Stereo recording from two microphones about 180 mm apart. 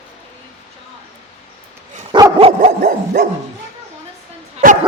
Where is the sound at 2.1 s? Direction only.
25° right (ahead or behind).